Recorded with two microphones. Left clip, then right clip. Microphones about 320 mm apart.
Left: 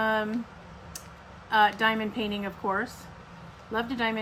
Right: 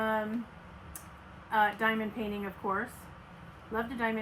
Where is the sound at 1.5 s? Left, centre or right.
Left.